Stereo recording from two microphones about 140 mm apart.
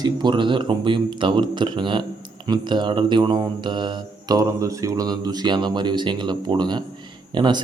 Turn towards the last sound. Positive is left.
turn(degrees=-30)  # may be behind; listen again after turning